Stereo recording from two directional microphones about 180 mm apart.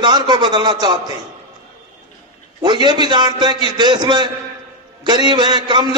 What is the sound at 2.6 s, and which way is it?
A man's voice, 25° right (ahead or behind).